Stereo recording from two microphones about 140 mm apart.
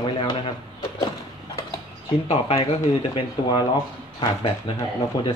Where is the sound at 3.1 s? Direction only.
30° left (ahead or behind).